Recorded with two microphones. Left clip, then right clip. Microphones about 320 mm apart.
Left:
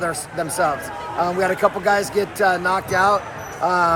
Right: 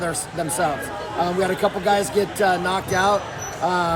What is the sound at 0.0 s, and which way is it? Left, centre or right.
A man's voice, centre.